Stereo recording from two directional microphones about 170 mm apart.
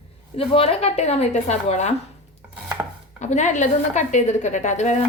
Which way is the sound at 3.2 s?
45° left (ahead or behind).